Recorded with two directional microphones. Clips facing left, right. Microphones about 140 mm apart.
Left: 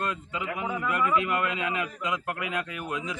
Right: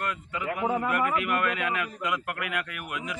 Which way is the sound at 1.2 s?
20° left (ahead or behind).